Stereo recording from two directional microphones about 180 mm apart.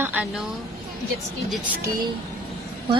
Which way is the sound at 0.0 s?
10° right (ahead or behind).